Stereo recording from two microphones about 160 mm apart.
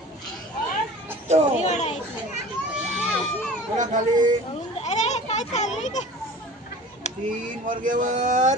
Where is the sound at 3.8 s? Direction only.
50° right (ahead or behind).